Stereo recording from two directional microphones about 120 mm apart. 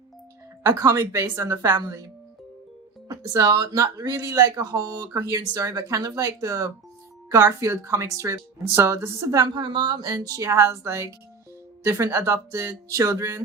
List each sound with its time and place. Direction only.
0.6 s speech: 30° right (ahead or behind)
3.1 s speech: 30° right (ahead or behind)